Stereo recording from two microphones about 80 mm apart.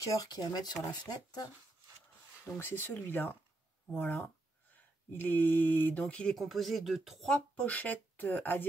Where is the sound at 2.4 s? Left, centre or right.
Left; by 6.3 s centre.